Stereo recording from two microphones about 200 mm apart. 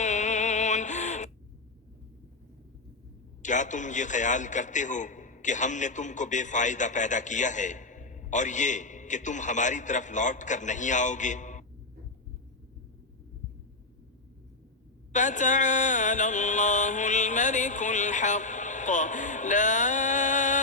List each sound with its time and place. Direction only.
0.0 s synthetic singing: 35° left (ahead or behind)
3.4 s a man's voice: 40° left (ahead or behind)
15.1 s mantra: 40° left (ahead or behind)